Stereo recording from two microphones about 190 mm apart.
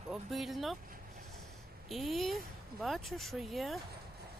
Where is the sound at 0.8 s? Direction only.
45° right (ahead or behind).